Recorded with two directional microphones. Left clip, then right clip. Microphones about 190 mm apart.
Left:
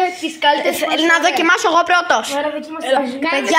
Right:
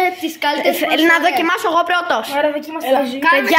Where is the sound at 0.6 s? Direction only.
25° right (ahead or behind).